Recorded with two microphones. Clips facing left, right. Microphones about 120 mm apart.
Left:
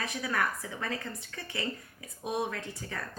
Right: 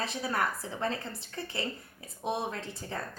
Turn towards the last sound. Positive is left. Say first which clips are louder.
# right 1 dB
turn(degrees=-25)  # may be behind; listen again after turning